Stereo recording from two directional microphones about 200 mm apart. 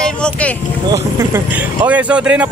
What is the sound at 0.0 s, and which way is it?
Vehicle, 5° left (ahead or behind).